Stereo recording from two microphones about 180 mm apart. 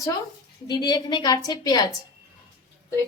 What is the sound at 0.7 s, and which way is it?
Speech, 20° left (ahead or behind).